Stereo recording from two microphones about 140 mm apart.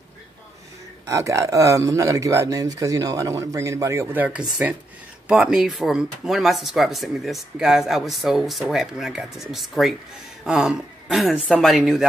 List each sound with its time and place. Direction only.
1.0 s speech: 20° right (ahead or behind); by 12.1 s 5° right (ahead or behind)